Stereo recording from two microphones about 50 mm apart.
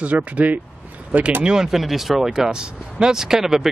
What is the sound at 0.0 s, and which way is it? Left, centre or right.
Speech, right.